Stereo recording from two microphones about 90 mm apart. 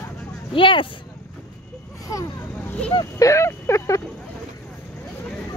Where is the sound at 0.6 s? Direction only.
70° left (ahead or behind).